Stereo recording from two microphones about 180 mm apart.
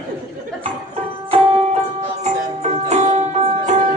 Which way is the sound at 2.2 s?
35° right (ahead or behind).